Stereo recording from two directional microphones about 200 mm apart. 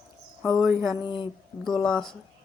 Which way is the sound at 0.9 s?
25° left (ahead or behind).